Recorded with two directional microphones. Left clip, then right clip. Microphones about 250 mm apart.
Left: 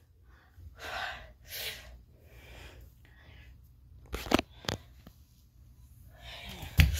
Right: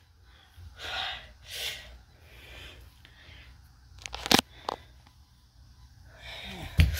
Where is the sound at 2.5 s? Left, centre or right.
Centre.